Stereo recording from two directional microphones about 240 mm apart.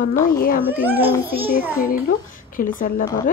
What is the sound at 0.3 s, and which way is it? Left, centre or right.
Speech, left.